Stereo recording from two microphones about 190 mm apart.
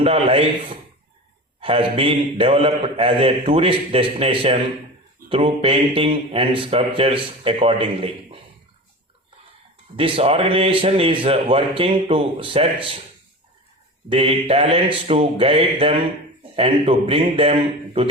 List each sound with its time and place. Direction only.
0.0 s a man's voice: 30° right (ahead or behind)
9.9 s a man's voice: 30° right (ahead or behind)
14.1 s a man's voice: 30° right (ahead or behind)